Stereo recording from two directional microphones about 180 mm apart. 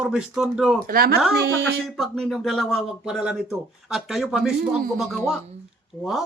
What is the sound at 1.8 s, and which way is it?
Speech, centre (ahead or behind).